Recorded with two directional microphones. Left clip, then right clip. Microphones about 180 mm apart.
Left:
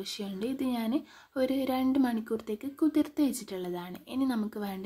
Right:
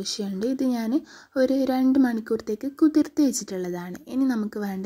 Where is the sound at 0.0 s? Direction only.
25° right (ahead or behind).